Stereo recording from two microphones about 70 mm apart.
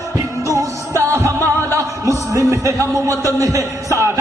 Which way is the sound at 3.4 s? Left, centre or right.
Right.